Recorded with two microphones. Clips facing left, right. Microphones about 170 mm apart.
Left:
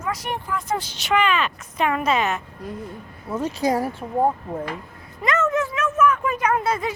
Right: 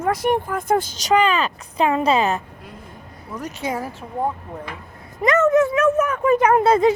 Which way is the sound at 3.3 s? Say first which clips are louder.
Left 5 dB; 30° left (ahead or behind).